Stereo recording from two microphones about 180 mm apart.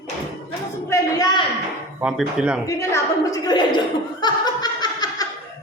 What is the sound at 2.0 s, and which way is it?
Speech, 5° right (ahead or behind).